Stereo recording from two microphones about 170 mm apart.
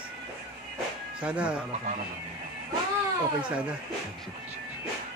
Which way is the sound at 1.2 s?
5° right (ahead or behind).